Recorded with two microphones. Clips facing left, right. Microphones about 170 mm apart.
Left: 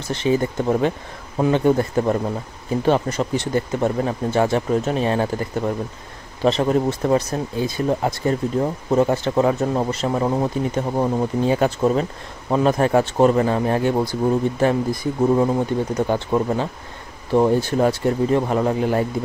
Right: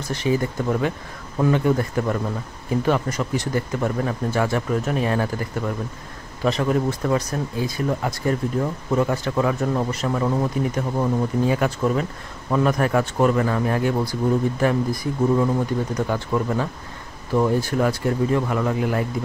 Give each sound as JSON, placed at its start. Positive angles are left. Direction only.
{"t": 0.1, "sound": "speech", "side_deg": 25}